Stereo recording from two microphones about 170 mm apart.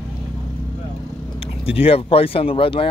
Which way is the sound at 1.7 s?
35° left (ahead or behind).